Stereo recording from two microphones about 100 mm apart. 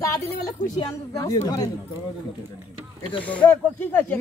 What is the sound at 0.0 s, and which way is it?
A woman's voice, 35° left (ahead or behind).